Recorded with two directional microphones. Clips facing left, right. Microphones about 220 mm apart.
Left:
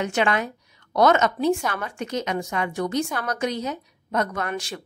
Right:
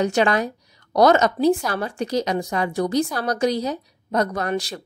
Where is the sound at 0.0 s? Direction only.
35° right (ahead or behind).